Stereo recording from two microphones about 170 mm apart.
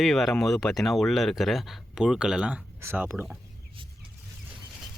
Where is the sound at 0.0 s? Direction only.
Centre (ahead or behind).